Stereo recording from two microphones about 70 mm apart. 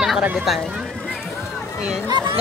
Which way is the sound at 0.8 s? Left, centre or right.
Centre.